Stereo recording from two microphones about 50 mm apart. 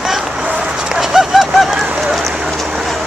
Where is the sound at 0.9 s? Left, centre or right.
Centre.